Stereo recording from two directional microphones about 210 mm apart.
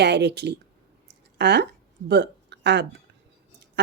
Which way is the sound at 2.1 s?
55° right (ahead or behind).